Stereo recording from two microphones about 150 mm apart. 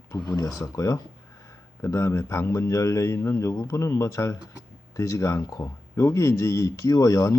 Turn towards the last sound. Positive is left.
turn(degrees=25)  # may be behind; listen again after turning